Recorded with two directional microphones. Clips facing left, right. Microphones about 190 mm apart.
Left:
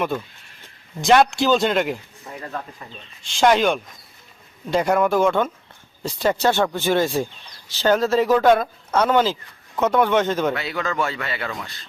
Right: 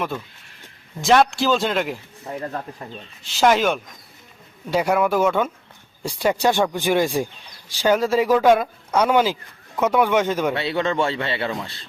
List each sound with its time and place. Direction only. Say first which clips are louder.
1.0 s a man's voice: left 1 dB; centre (ahead or behind)
3.2 s a man's voice: left 1 dB; 5° right (ahead or behind)
10.5 s speech: right 3 dB; 30° right (ahead or behind)